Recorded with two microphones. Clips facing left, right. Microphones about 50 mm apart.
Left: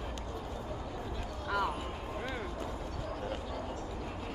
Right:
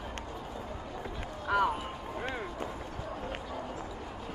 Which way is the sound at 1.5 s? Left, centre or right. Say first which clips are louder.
Right 5 dB; right.